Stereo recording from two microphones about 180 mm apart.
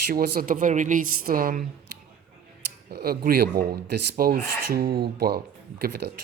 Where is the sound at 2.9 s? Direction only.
60° right (ahead or behind).